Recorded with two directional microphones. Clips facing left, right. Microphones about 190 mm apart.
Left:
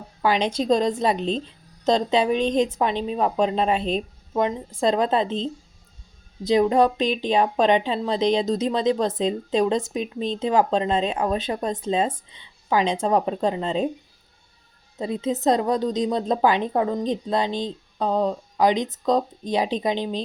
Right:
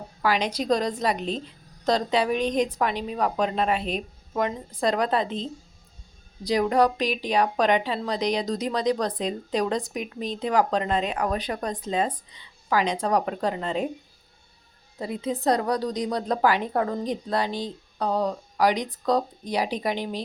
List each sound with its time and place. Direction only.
0.2 s a woman's voice: 25° left (ahead or behind)
14.9 s a woman's voice: 25° left (ahead or behind)